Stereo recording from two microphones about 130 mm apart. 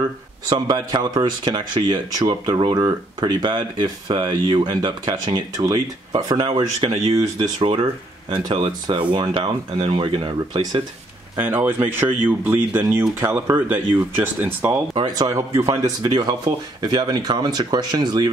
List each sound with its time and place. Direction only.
0.5 s speech: 35° right (ahead or behind)
11.3 s speech: 15° right (ahead or behind)
15.0 s speech: 30° right (ahead or behind)